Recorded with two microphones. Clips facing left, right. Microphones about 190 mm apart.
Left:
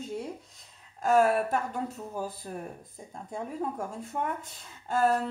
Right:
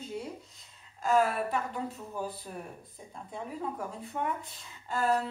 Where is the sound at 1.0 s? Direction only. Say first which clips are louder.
Left 4 dB; 50° left (ahead or behind).